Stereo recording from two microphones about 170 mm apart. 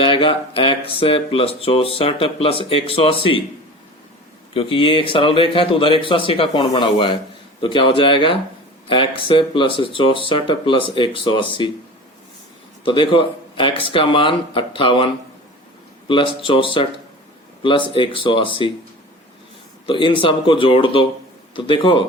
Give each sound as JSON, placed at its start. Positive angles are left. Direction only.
{"t": 0.0, "sound": "speech", "side_deg": 30}
{"t": 4.5, "sound": "speech", "side_deg": 30}
{"t": 12.8, "sound": "speech", "side_deg": 30}
{"t": 19.9, "sound": "speech", "side_deg": 30}